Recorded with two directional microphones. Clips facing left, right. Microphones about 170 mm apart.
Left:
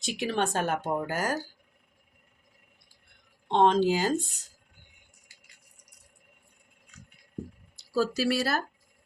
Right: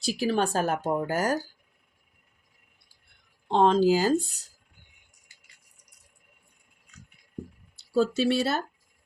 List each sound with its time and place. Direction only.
0.0 s speech: 35° right (ahead or behind)
3.5 s speech: 35° right (ahead or behind)
7.8 s speech: 25° right (ahead or behind)